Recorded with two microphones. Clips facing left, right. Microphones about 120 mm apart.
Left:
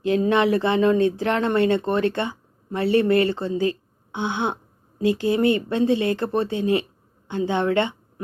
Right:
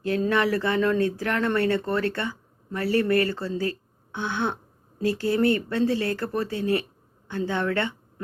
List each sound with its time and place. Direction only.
0.0 s speech: 20° left (ahead or behind)